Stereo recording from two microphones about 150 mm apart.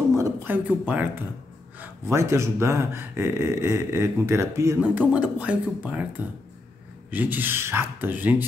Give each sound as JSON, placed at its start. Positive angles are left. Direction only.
{"t": 0.1, "sound": "speech", "side_deg": -15}